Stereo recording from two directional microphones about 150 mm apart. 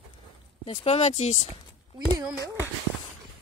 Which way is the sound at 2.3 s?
20° left (ahead or behind).